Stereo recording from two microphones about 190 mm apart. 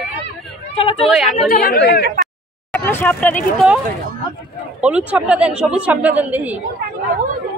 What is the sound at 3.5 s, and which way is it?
Speech, 5° right (ahead or behind).